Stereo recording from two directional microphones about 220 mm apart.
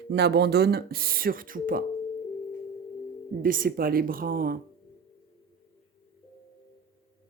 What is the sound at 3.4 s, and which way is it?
A woman's voice, 40° right (ahead or behind).